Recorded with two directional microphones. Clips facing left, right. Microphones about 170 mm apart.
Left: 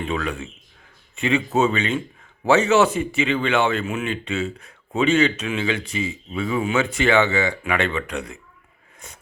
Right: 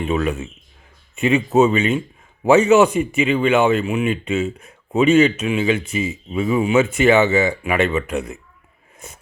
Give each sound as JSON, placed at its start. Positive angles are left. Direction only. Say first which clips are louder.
{"t": 0.1, "sound": "speech", "louder": "right 5 dB", "side_deg": -20}